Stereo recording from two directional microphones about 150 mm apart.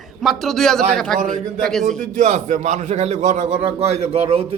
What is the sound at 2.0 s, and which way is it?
A man's voice, 55° right (ahead or behind).